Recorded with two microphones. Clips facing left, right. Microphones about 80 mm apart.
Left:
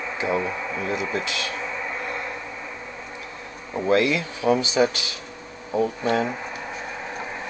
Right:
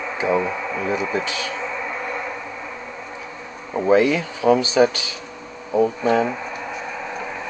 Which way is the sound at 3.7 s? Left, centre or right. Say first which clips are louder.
Right 4 dB; centre.